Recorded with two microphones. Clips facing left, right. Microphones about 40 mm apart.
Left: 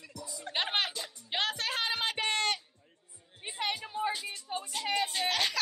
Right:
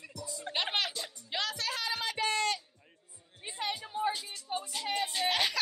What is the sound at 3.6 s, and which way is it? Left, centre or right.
Music, left.